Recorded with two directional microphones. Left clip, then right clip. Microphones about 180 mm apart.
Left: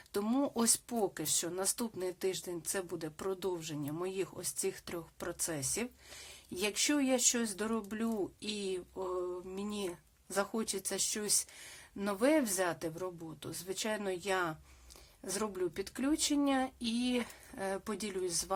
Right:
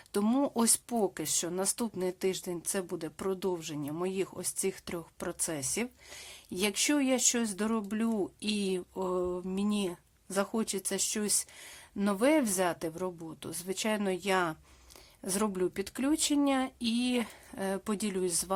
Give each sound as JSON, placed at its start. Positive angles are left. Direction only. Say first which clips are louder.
{"t": 0.1, "sound": "speech", "louder": "right 4 dB", "side_deg": -30}